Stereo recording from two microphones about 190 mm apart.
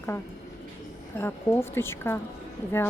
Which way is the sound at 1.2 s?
10° left (ahead or behind).